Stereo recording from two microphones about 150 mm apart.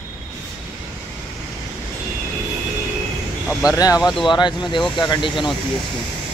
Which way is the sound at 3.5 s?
Centre (ahead or behind).